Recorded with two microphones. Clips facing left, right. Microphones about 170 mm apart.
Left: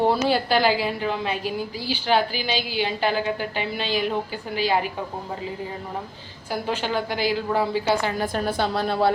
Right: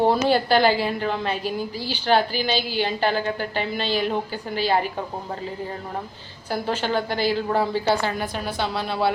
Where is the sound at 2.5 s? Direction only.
45° right (ahead or behind).